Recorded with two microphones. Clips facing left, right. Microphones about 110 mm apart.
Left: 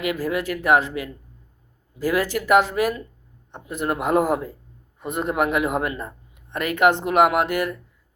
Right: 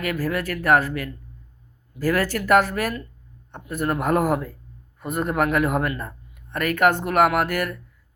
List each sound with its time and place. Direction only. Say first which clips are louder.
0.0 s speech: left 1 dB; 20° left (ahead or behind)